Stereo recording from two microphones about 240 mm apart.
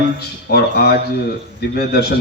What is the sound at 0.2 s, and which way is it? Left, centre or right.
A man's voice, left.